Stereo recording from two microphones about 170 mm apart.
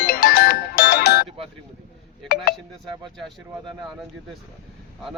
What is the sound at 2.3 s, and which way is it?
Speech, 65° left (ahead or behind).